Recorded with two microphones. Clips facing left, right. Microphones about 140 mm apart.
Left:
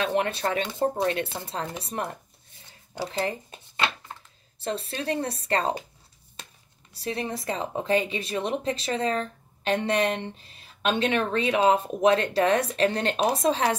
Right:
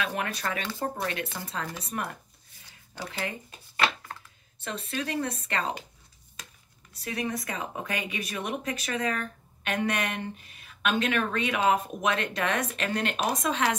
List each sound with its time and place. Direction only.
0.0 s speech: 30° left (ahead or behind)
6.9 s speech: 30° left (ahead or behind)